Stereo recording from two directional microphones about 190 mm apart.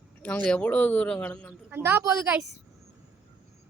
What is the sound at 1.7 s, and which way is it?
Speech, 10° right (ahead or behind).